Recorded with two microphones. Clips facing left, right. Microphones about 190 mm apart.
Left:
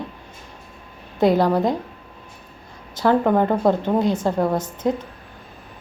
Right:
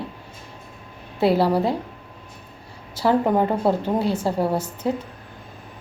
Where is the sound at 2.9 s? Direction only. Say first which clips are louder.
Left 2 dB; 10° right (ahead or behind).